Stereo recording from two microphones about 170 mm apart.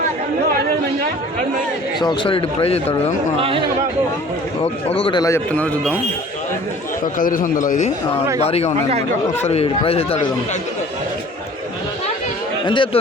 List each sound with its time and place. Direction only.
2.0 s a man's voice: 30° left (ahead or behind)
4.6 s a man's voice: 35° left (ahead or behind)
5.2 s a man's voice: 10° left (ahead or behind)
7.0 s a man's voice: 55° left (ahead or behind)
8.4 s a man's voice: 40° left (ahead or behind)
12.6 s speech: 30° left (ahead or behind)